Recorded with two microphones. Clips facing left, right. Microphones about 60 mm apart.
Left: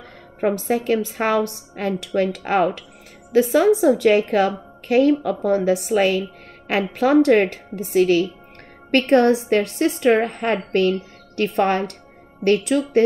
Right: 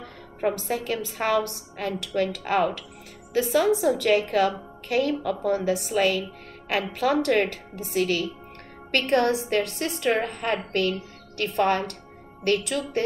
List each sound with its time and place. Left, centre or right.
0.4 s a woman's voice: left